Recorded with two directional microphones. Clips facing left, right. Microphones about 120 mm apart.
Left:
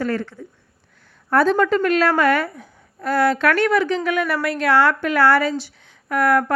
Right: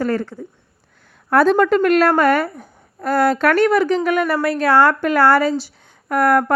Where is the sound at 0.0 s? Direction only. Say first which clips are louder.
Right 3 dB; 40° right (ahead or behind).